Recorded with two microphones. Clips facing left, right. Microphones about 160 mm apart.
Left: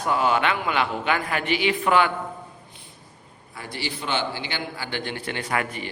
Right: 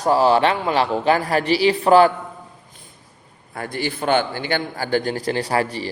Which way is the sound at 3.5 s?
55° right (ahead or behind).